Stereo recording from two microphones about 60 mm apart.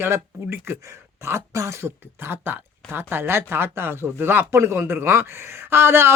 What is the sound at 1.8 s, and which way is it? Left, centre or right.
Speech, right.